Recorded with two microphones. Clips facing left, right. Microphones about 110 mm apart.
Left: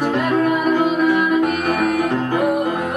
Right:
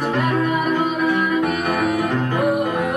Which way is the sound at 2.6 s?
15° left (ahead or behind).